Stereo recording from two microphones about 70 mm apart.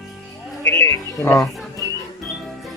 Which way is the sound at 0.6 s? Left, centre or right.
Left.